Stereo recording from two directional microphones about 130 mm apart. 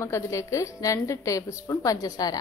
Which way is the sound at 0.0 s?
25° left (ahead or behind).